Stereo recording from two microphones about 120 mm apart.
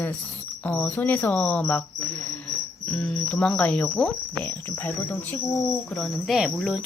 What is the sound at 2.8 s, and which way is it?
Cricket, 10° left (ahead or behind).